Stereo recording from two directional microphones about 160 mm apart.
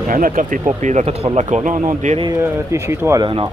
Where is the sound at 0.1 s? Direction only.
55° right (ahead or behind).